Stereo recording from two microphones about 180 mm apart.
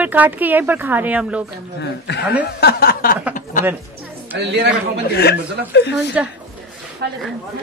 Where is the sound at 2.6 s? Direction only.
55° left (ahead or behind).